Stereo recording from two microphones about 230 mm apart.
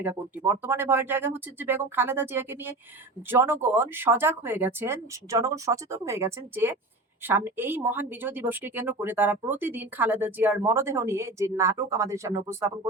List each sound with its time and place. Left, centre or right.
0.0 s speech: centre